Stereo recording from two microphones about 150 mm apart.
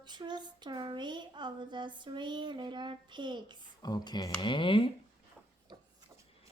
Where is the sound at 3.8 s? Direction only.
30° left (ahead or behind).